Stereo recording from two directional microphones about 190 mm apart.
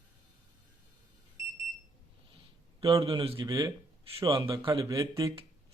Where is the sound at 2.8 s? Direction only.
30° right (ahead or behind).